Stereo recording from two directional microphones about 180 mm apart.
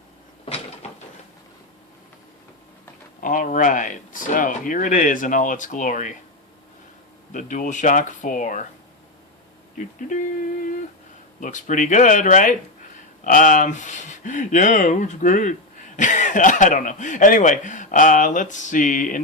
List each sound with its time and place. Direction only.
3.2 s speech: 50° left (ahead or behind)
7.3 s speech: 45° left (ahead or behind)
9.7 s speech: 45° left (ahead or behind)